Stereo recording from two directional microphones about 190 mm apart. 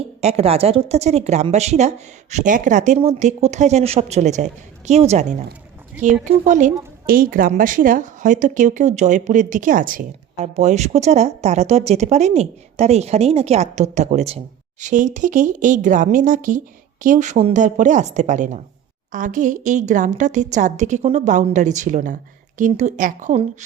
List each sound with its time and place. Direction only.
0.2 s speech: 35° right (ahead or behind)
6.2 s speech: 40° right (ahead or behind)